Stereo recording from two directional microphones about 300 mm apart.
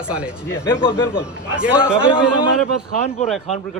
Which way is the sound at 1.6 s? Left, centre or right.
Centre.